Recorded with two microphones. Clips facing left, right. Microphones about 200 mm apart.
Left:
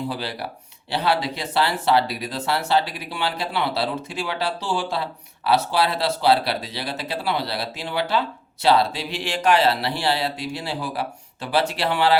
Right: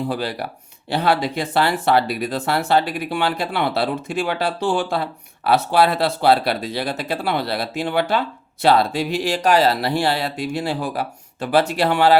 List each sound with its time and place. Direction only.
0.1 s speech: 45° right (ahead or behind)